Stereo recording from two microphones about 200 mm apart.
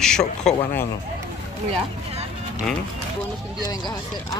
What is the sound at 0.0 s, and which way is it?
Speech, 5° left (ahead or behind).